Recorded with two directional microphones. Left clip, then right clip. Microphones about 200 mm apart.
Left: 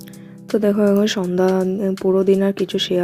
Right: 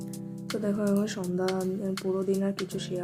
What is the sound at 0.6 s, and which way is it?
Speech, 35° left (ahead or behind).